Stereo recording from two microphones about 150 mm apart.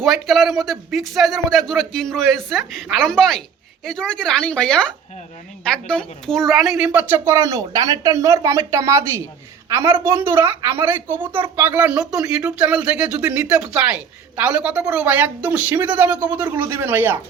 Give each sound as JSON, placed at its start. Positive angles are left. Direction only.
{"t": 0.0, "sound": "a woman's voice", "side_deg": 0}